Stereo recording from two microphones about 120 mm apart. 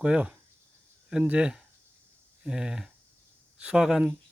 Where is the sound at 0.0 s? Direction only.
10° right (ahead or behind).